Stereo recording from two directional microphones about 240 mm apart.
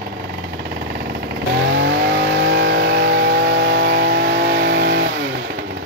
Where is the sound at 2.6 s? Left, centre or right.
Right.